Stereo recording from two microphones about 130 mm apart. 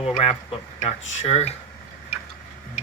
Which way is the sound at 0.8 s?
55° left (ahead or behind).